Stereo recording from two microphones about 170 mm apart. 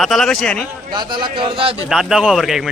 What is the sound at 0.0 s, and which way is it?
Speech, centre (ahead or behind).